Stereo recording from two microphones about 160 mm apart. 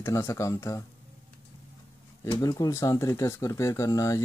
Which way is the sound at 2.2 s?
25° left (ahead or behind).